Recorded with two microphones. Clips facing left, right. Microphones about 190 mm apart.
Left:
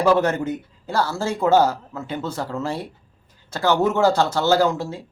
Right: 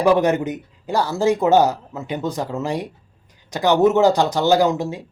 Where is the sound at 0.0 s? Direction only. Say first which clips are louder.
Right 2 dB; 15° right (ahead or behind).